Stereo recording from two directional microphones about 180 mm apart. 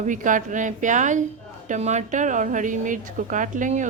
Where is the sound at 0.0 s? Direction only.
45° right (ahead or behind).